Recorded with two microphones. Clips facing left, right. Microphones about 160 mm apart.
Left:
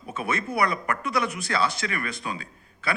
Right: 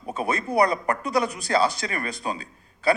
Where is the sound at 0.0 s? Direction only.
35° right (ahead or behind).